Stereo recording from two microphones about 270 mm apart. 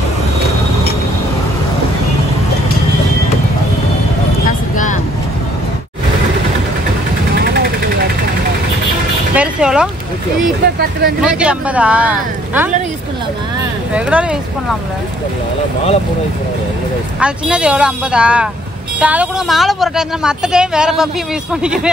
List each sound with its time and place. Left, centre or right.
4.5 s vehicle: left
7.3 s vehicle: right
9.3 s vehicle: centre
10.6 s speech: right
11.2 s a woman's voice: centre
13.9 s a woman's voice: centre
17.2 s a woman's voice: centre